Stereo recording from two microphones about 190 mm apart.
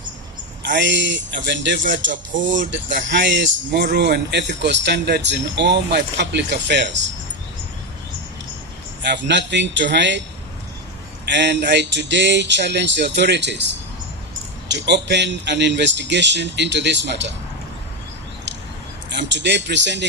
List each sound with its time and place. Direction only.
0.6 s a man's voice: 70° right (ahead or behind)
9.0 s speech: 65° right (ahead or behind)
11.3 s a man's voice: 65° right (ahead or behind)
14.7 s a man's voice: 65° right (ahead or behind)
19.1 s speech: 65° right (ahead or behind)